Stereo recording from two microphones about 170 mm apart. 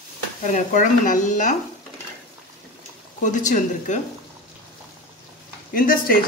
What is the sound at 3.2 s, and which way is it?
Speech, 45° left (ahead or behind).